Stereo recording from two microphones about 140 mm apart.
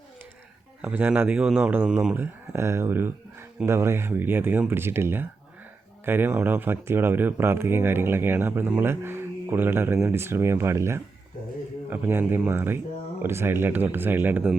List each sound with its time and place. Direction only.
0.8 s speech: 10° right (ahead or behind)